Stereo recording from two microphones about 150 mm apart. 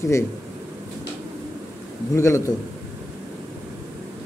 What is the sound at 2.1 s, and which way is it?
Speech, 20° left (ahead or behind).